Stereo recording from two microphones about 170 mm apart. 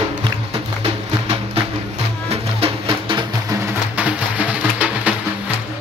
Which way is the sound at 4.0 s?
10° right (ahead or behind).